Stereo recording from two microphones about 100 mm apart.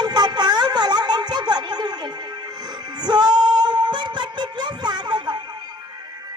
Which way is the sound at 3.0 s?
45° right (ahead or behind).